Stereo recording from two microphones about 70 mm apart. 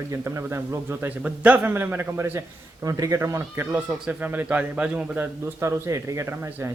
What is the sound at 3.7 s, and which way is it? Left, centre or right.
A man's voice, right.